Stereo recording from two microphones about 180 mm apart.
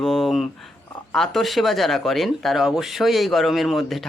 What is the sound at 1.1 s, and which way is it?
Speech, centre (ahead or behind).